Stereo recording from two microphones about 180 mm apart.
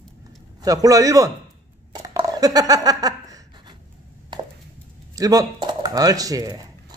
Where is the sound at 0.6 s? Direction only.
20° right (ahead or behind).